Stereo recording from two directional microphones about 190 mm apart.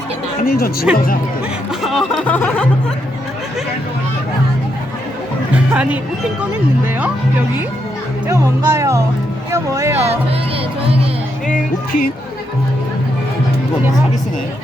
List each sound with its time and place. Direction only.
0.4 s speech: 50° left (ahead or behind)
1.8 s music: centre (ahead or behind)
5.5 s speech: 5° right (ahead or behind)
8.3 s speech: 15° right (ahead or behind)